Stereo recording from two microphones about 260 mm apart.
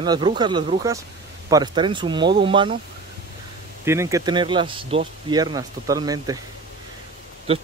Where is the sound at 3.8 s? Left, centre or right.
Centre.